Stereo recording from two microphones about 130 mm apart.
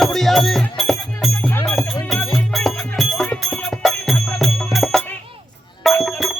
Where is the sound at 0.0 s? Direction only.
Centre (ahead or behind).